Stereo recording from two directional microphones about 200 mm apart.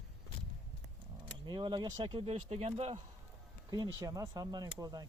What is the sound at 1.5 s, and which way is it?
Speech, 25° right (ahead or behind).